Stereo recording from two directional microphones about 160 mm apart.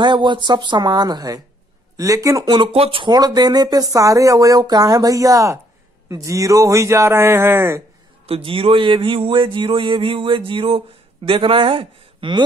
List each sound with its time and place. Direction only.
0.0 s speech: 30° right (ahead or behind)
8.3 s a man's voice: 35° right (ahead or behind)